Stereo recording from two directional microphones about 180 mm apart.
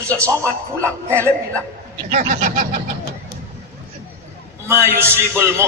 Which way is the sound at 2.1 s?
45° right (ahead or behind).